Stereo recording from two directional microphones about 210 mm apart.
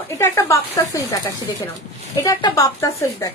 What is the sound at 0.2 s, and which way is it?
Speech, 15° left (ahead or behind).